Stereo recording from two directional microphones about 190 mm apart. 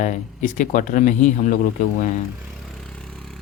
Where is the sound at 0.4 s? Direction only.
40° left (ahead or behind).